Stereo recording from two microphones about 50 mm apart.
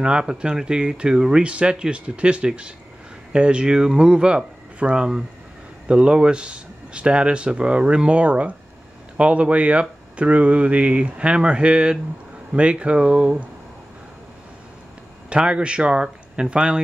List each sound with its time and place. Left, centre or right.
0.0 s speech: centre
15.2 s speech: right